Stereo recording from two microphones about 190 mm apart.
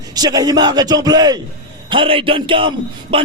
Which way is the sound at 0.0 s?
20° right (ahead or behind).